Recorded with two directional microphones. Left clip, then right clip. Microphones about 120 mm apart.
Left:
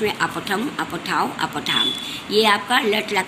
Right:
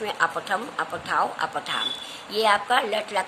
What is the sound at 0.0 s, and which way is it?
A woman's voice, 55° right (ahead or behind).